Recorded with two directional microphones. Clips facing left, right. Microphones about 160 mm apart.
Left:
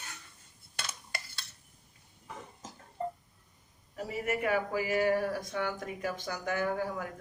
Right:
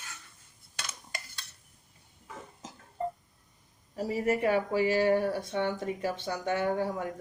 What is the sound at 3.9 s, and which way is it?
Speech, 30° right (ahead or behind).